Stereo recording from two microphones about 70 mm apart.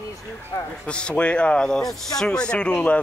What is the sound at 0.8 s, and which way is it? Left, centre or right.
Speech, centre.